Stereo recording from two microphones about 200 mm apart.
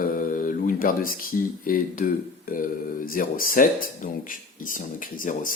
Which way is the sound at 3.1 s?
45° left (ahead or behind).